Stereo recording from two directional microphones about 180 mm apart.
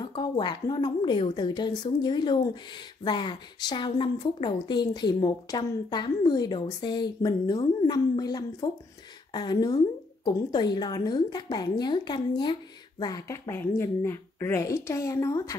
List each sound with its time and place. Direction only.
0.0 s a woman's voice: 25° left (ahead or behind)